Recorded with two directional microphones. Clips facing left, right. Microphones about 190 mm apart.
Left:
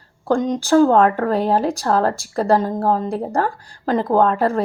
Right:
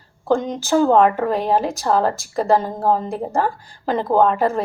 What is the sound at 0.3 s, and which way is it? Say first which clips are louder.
A woman's voice: left 5 dB; 5° right (ahead or behind).